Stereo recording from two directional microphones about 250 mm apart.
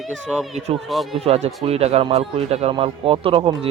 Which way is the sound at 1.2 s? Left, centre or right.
Right.